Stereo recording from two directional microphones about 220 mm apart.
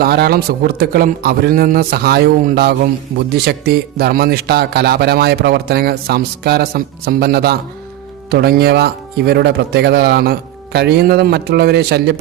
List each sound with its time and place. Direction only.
0.0 s a man's voice: 45° right (ahead or behind)